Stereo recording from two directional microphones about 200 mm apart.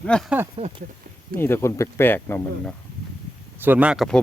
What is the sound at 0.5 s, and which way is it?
Speech, 25° right (ahead or behind).